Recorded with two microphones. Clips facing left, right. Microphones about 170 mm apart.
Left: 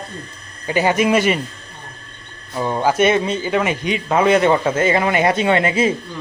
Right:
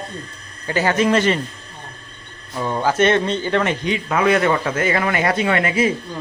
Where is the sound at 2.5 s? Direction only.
15° left (ahead or behind).